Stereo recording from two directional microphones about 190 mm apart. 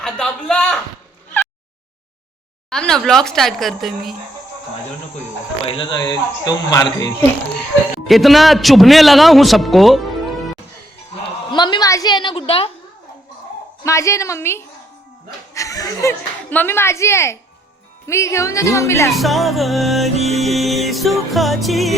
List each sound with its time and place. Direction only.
0.0 s music: 5° left (ahead or behind)
2.6 s music: 5° left (ahead or behind)
5.6 s speech: 25° left (ahead or behind)
8.0 s music: centre (ahead or behind)
11.5 s speech: 25° left (ahead or behind)
13.8 s speech: 15° left (ahead or behind)
19.1 s music: centre (ahead or behind)